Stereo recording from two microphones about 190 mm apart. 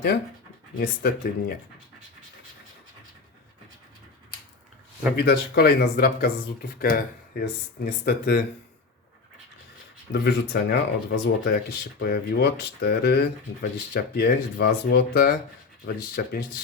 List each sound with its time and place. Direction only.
0.8 s speech: 50° left (ahead or behind)
5.1 s speech: 55° left (ahead or behind)
10.1 s speech: 55° left (ahead or behind)